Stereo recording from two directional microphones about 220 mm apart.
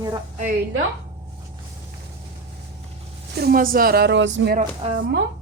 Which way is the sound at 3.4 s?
40° right (ahead or behind).